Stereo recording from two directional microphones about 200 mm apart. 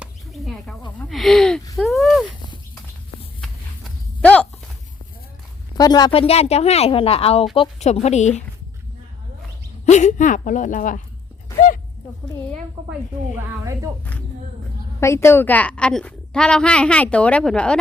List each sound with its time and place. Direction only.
0.0 s a sound: centre (ahead or behind)
4.2 s a sound: 5° left (ahead or behind)
5.7 s a woman's voice: 20° left (ahead or behind)
9.8 s a woman's voice: 35° left (ahead or behind)
12.9 s speech: 10° right (ahead or behind)
15.0 s a woman's voice: 15° left (ahead or behind)